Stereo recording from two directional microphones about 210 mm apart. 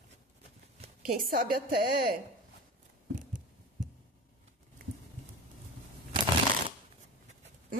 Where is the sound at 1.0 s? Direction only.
45° right (ahead or behind).